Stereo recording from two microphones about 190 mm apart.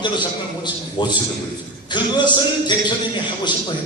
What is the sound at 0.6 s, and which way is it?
A man's voice, 25° left (ahead or behind).